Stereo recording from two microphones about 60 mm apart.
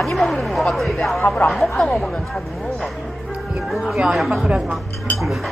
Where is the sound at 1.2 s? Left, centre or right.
Left.